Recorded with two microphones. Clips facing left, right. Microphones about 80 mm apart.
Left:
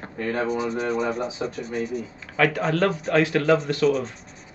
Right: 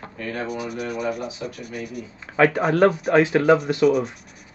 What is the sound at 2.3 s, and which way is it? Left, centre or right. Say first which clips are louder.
Speech: right 4 dB; right.